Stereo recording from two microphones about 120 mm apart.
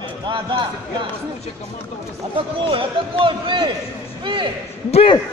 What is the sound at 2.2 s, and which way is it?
A man's voice, 45° right (ahead or behind).